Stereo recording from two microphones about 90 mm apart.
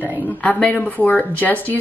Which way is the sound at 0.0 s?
15° left (ahead or behind).